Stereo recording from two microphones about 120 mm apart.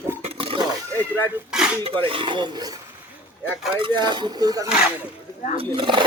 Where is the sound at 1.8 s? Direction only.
50° right (ahead or behind).